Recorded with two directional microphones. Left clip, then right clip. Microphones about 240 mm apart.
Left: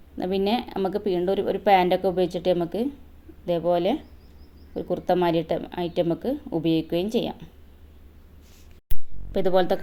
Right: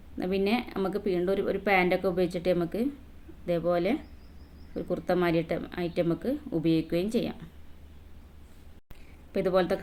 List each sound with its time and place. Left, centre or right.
0.2 s speech: centre
9.3 s speech: centre